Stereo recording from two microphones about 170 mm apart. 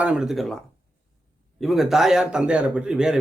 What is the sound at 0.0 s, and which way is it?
Speech, 5° right (ahead or behind).